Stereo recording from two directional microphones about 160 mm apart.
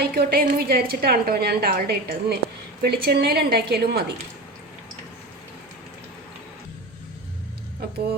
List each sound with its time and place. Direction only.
0.0 s a woman's voice: 70° right (ahead or behind)
2.8 s a woman's voice: 80° right